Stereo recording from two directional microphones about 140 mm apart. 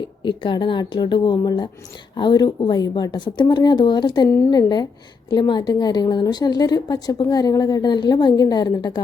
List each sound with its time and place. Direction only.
0.2 s a woman's voice: 35° left (ahead or behind)
4.3 s a woman's voice: 20° left (ahead or behind)
5.3 s a woman's voice: 30° left (ahead or behind)